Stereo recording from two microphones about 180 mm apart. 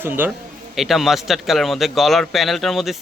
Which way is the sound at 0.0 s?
10° right (ahead or behind).